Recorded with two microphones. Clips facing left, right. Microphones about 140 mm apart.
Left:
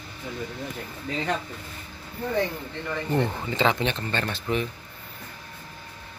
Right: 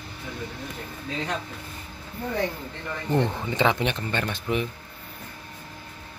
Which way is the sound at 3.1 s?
20° right (ahead or behind).